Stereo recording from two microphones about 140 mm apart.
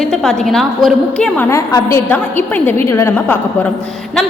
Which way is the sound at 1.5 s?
20° left (ahead or behind).